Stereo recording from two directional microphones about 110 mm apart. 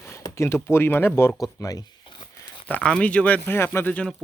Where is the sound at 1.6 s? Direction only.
35° left (ahead or behind).